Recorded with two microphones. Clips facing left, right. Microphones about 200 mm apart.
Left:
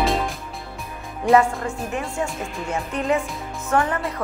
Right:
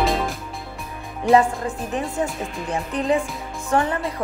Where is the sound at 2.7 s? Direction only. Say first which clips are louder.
Right 1 dB; 35° right (ahead or behind).